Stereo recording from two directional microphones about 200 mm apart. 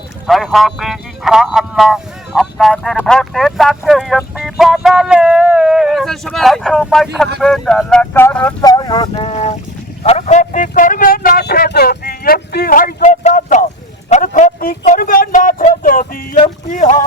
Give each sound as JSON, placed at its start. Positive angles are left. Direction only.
{"t": 0.3, "sound": "speech", "side_deg": 0}
{"t": 8.6, "sound": "boat", "side_deg": 20}
{"t": 10.0, "sound": "speech", "side_deg": 35}
{"t": 16.4, "sound": "a sound", "side_deg": 40}